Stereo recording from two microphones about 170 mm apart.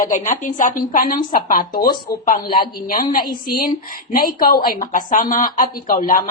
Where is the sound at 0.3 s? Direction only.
50° left (ahead or behind).